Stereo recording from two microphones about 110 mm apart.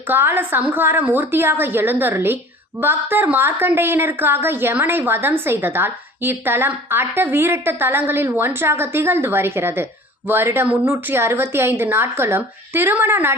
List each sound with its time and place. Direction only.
0.1 s a woman's voice: 20° right (ahead or behind)